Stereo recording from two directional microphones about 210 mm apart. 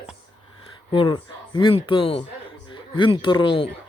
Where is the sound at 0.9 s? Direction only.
25° left (ahead or behind).